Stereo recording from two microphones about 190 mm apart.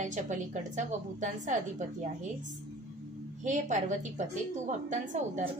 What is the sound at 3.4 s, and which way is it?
A woman's voice, 40° right (ahead or behind).